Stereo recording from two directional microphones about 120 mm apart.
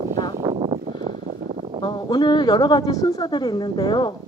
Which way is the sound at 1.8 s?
35° left (ahead or behind).